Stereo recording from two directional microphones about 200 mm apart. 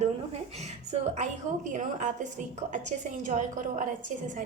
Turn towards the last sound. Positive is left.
turn(degrees=-40)  # may be behind; listen again after turning